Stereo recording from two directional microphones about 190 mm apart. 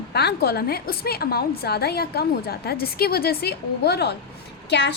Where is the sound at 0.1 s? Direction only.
60° left (ahead or behind).